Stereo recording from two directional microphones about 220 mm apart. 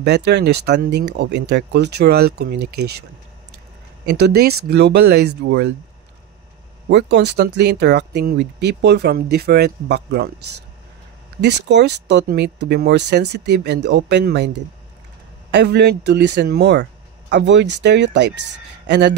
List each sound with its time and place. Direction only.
0.0 s speech: 50° right (ahead or behind)
4.1 s speech: 45° right (ahead or behind)
6.9 s speech: 50° right (ahead or behind)
11.4 s speech: 50° right (ahead or behind)
15.5 s speech: 50° right (ahead or behind)